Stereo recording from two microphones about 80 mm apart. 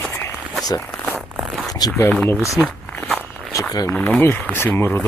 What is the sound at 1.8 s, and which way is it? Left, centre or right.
Speech, left.